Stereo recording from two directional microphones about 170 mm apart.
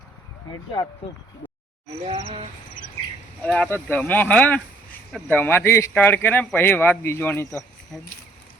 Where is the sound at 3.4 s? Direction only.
5° left (ahead or behind).